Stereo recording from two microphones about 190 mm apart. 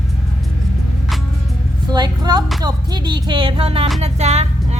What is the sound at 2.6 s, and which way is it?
Speech, 25° right (ahead or behind).